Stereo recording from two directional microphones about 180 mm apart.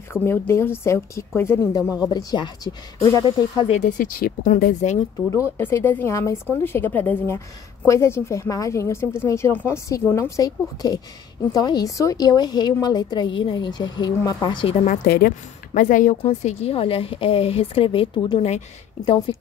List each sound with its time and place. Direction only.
0.1 s a woman's voice: 15° left (ahead or behind)
3.9 s speech: 50° left (ahead or behind)
5.3 s a woman's voice: 15° left (ahead or behind)
14.9 s a woman's voice: 55° left (ahead or behind); by 19.3 s 30° left (ahead or behind)